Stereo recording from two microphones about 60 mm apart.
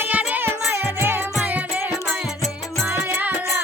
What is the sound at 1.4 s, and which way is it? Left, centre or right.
Music, right.